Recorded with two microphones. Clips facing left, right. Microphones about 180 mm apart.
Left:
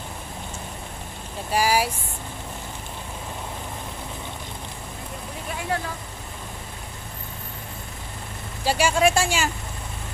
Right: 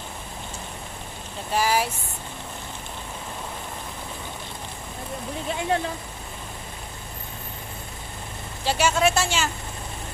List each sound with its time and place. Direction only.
1.5 s speech: 10° left (ahead or behind)
8.6 s speech: 10° left (ahead or behind)